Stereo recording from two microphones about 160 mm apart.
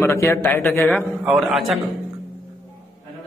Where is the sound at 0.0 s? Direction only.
15° left (ahead or behind).